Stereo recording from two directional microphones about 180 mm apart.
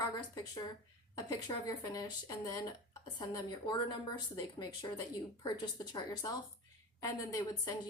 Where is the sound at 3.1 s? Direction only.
20° left (ahead or behind).